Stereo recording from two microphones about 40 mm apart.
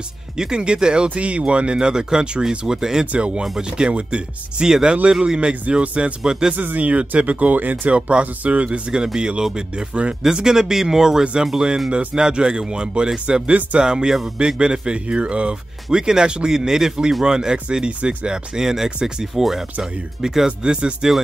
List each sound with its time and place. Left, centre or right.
0.4 s speech: centre
3.1 s speech: right
6.5 s speech: right
8.9 s speech: right
10.2 s speech: centre
19.3 s speech: centre; by 21.1 s right